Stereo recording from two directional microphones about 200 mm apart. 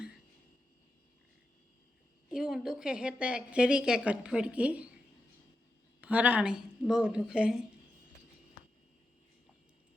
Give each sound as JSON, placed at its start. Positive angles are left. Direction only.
{"t": 2.3, "sound": "a woman's voice", "side_deg": 0}
{"t": 6.0, "sound": "a woman's voice", "side_deg": -5}